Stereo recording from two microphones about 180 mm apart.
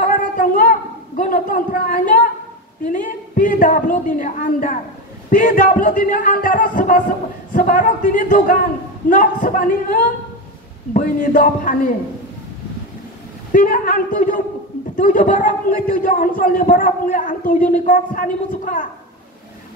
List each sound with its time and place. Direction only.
0.0 s a sound: 50° left (ahead or behind)
2.8 s a man's voice: 45° left (ahead or behind)
13.5 s a man's voice: 50° left (ahead or behind)